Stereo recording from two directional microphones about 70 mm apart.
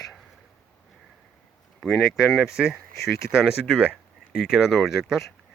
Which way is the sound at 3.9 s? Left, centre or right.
Centre.